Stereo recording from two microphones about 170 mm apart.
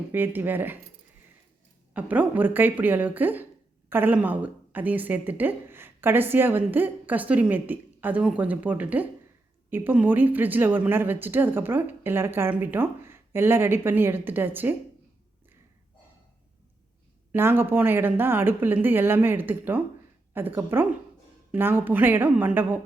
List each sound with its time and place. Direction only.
0.1 s a woman's voice: 10° right (ahead or behind)
1.9 s a woman's voice: 10° right (ahead or behind)
17.3 s a woman's voice: 10° right (ahead or behind)